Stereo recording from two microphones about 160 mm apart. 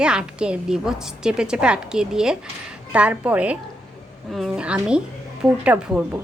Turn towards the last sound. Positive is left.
turn(degrees=-10)  # may be behind; listen again after turning